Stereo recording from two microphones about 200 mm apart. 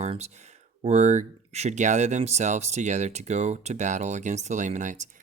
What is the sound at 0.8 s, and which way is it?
Speech, 35° right (ahead or behind).